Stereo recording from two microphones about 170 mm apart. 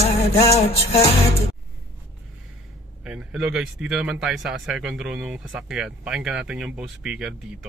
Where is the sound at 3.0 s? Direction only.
5° right (ahead or behind).